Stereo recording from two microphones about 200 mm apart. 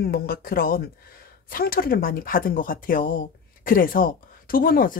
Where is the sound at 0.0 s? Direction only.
50° left (ahead or behind).